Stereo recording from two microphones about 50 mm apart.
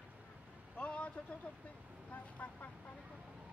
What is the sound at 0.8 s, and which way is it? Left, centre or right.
Vehicle, left.